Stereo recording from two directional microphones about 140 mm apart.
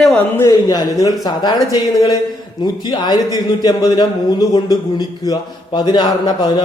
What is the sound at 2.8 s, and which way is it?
A man's voice, 30° left (ahead or behind).